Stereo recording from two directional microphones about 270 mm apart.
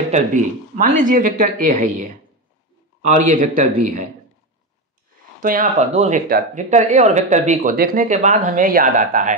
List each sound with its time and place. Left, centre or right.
0.1 s speech: right
5.4 s speech: right